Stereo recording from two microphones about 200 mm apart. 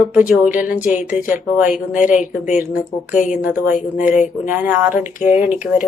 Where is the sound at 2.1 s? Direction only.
40° left (ahead or behind).